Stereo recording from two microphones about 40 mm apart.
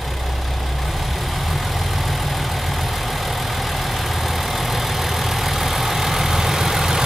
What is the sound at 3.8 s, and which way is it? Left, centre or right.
Vehicle, centre.